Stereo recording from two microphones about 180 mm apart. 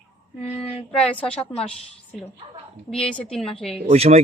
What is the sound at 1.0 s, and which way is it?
Speech, 5° left (ahead or behind).